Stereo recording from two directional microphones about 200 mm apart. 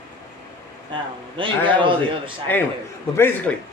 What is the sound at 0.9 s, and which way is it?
A man's voice, 25° right (ahead or behind).